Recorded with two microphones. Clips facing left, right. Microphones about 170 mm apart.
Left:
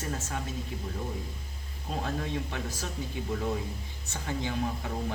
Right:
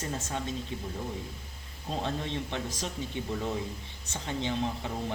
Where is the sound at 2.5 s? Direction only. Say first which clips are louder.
Right 1 dB; 20° right (ahead or behind).